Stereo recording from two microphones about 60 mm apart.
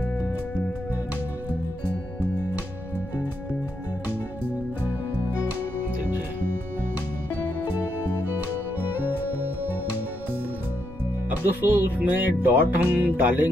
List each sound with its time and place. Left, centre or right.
11.2 s speech: right